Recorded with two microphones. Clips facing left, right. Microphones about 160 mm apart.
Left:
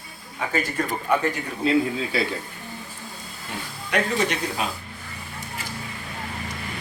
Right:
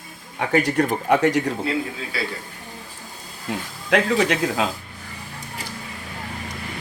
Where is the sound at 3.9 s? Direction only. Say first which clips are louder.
Right 5 dB; 90° right.